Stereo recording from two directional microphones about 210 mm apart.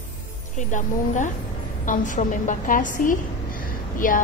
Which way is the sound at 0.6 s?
35° left (ahead or behind).